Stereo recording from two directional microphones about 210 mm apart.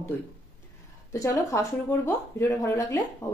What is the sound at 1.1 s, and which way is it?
Speech, 15° left (ahead or behind).